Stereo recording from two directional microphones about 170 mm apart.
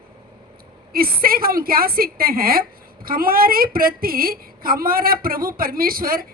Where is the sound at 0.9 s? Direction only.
60° right (ahead or behind).